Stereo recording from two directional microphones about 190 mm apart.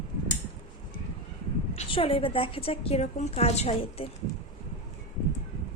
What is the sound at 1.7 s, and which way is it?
A woman's voice, 30° left (ahead or behind).